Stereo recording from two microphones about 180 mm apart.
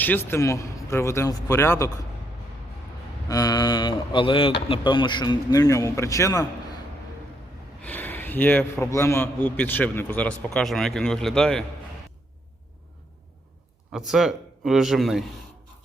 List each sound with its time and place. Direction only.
0.0 s a man's voice: 10° left (ahead or behind)
3.2 s speech: 20° left (ahead or behind)
7.8 s a man's voice: 10° left (ahead or behind)
13.9 s a man's voice: centre (ahead or behind)